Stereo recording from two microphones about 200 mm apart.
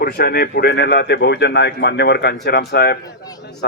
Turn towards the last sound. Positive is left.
turn(degrees=55)  # may be behind; listen again after turning